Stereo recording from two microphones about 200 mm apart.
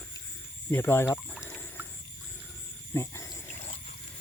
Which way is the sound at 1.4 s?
10° left (ahead or behind).